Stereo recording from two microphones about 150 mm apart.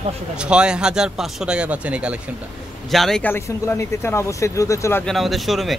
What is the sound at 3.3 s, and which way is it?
Speech, 15° left (ahead or behind).